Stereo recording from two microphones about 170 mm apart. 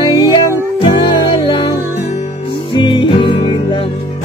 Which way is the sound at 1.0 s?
30° left (ahead or behind).